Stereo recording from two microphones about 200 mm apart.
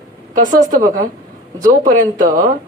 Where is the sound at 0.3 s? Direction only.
40° right (ahead or behind).